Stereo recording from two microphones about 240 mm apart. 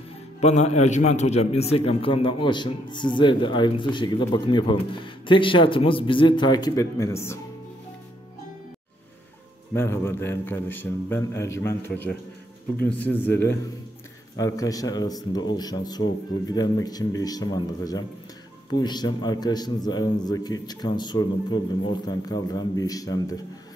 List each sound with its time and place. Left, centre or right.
0.4 s speech: left; by 7.3 s centre
9.8 s a man's voice: centre